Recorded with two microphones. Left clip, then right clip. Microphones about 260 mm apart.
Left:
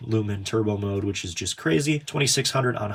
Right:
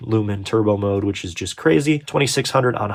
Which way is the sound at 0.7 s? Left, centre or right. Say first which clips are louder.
Right 8 dB; centre.